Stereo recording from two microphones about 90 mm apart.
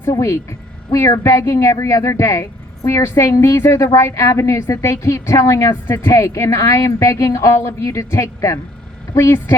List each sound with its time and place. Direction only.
0.1 s speech: 35° left (ahead or behind)